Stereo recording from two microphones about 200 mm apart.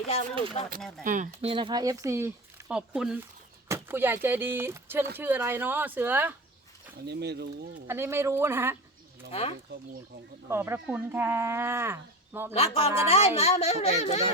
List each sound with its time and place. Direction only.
0.1 s speech: 35° left (ahead or behind)
0.8 s speech: centre (ahead or behind)
1.0 s speech: 40° right (ahead or behind); by 6.3 s 10° right (ahead or behind)
7.0 s speech: 55° right (ahead or behind)
7.9 s speech: 10° right (ahead or behind)
9.3 s speech: 30° left (ahead or behind)
10.5 s speech: 10° right (ahead or behind)
12.5 s speech: 30° left (ahead or behind)